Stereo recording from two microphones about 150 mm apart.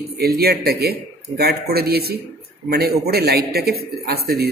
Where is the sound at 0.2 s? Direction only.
90° right.